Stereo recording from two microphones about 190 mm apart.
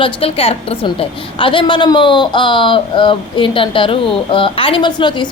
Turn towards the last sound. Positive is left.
turn(degrees=25)  # may be behind; listen again after turning